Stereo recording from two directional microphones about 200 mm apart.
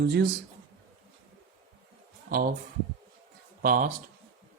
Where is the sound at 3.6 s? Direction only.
45° right (ahead or behind).